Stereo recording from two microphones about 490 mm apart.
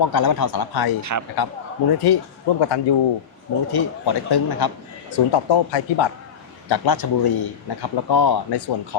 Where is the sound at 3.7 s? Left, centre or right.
Left.